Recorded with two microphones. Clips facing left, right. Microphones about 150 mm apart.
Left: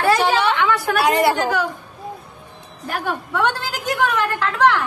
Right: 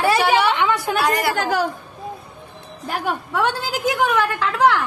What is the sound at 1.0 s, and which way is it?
Speech, 25° left (ahead or behind).